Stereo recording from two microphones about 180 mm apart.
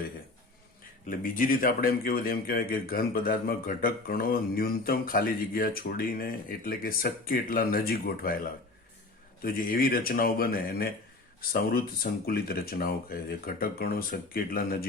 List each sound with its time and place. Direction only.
1.0 s speech: 50° left (ahead or behind)
9.4 s speech: 55° left (ahead or behind)